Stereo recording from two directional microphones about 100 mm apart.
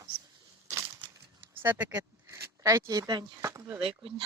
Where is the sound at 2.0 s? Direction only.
30° right (ahead or behind).